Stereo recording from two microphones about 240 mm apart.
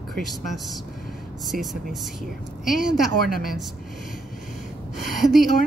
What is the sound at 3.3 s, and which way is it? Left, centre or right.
Speech, left.